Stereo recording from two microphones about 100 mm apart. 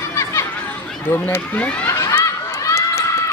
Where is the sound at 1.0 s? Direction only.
20° left (ahead or behind).